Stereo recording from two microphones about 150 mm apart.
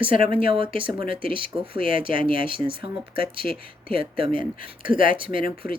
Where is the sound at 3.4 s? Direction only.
85° left.